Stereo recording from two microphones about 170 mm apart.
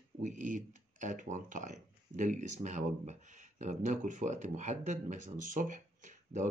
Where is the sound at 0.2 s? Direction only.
50° right (ahead or behind).